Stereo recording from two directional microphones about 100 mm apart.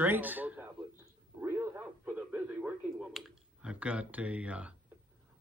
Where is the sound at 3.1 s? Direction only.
10° right (ahead or behind).